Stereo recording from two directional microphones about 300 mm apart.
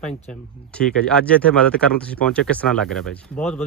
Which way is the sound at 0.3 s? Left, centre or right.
Centre.